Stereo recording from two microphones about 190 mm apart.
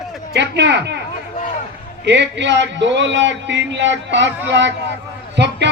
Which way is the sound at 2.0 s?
65° right (ahead or behind).